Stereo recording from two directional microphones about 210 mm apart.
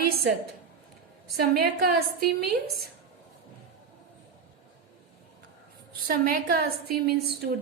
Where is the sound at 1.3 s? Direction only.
50° right (ahead or behind).